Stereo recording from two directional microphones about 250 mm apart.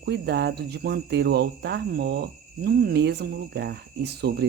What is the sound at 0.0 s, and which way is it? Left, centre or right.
Speech, right.